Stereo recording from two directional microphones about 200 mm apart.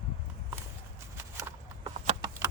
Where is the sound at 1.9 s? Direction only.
20° right (ahead or behind).